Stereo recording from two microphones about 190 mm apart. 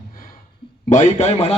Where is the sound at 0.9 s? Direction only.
40° left (ahead or behind).